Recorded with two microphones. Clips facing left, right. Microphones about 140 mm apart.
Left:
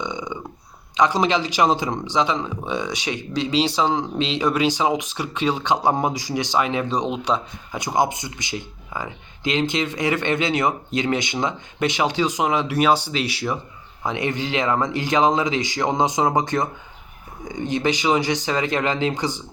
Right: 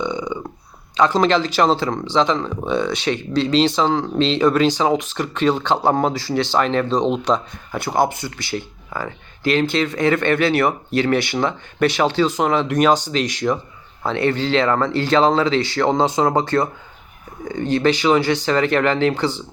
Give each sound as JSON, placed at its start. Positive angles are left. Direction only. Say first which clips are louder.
{"t": 0.0, "sound": "burping", "louder": "right 5 dB", "side_deg": 20}
{"t": 0.9, "sound": "speech", "louder": "right 3 dB", "side_deg": 15}